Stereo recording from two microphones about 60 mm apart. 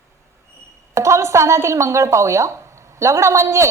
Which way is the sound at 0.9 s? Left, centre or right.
Right.